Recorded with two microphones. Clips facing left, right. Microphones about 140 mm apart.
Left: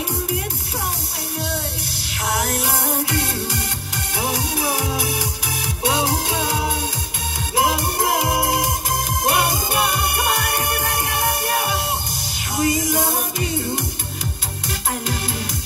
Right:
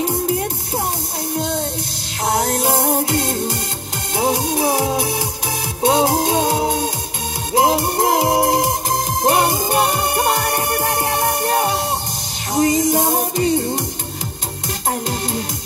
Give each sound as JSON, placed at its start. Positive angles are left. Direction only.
{"t": 2.2, "sound": "music", "side_deg": -35}
{"t": 4.2, "sound": "music", "side_deg": -25}
{"t": 6.4, "sound": "music", "side_deg": -25}
{"t": 12.9, "sound": "music", "side_deg": -30}